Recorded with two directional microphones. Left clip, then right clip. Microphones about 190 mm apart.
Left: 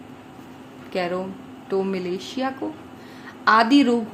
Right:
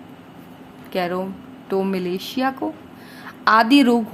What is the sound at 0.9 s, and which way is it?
A woman's voice, 25° right (ahead or behind).